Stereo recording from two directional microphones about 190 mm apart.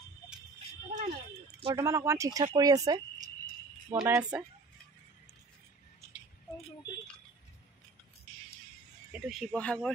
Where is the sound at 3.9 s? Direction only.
10° right (ahead or behind).